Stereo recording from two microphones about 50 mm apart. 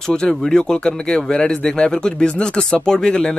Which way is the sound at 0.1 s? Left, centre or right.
Centre.